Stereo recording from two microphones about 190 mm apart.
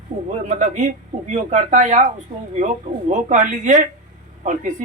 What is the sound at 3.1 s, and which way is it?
Speech, 40° right (ahead or behind).